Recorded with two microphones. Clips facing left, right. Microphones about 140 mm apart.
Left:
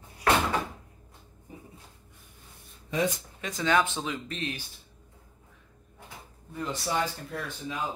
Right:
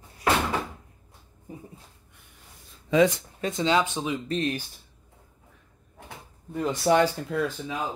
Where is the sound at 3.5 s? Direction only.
20° right (ahead or behind).